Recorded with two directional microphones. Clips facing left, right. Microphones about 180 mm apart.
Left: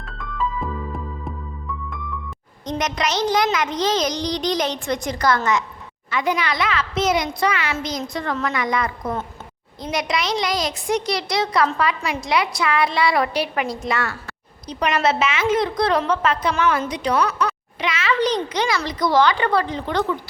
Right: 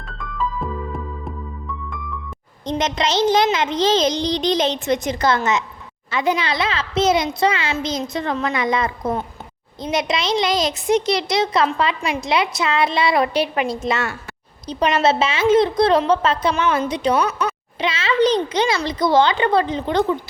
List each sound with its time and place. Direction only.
0.0 s music: centre (ahead or behind)
2.6 s a woman's voice: 25° right (ahead or behind)